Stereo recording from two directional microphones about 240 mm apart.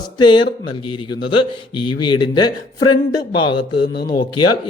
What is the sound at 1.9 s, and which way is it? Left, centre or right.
A man's voice, centre.